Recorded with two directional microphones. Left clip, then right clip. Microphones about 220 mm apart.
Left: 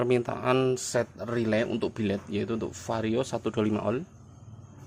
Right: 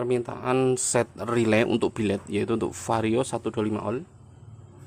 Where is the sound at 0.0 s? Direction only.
5° left (ahead or behind).